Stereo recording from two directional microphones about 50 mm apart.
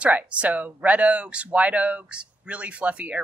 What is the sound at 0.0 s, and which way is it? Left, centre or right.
Speech, right.